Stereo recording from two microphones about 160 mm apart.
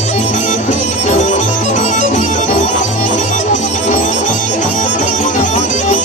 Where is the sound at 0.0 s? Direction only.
45° left (ahead or behind).